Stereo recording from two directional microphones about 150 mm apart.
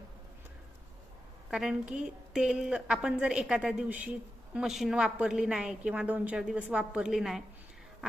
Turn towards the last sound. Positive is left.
turn(degrees=0)  # may be behind; listen again after turning